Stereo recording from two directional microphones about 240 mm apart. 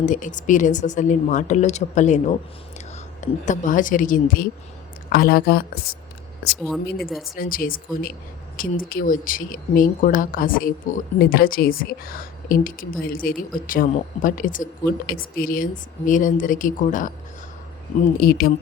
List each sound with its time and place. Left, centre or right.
0.0 s a woman's voice: left
7.3 s speech: left
18.2 s speech: left